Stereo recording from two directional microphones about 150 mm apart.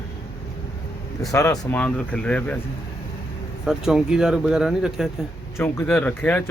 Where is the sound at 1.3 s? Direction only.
20° left (ahead or behind).